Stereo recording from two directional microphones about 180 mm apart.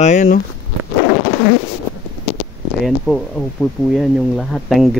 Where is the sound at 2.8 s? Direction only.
5° left (ahead or behind).